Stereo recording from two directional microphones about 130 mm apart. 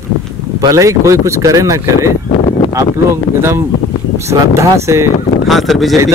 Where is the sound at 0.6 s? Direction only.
25° right (ahead or behind).